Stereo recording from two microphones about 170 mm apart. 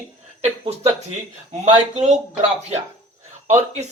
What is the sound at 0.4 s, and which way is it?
Speech, 40° right (ahead or behind).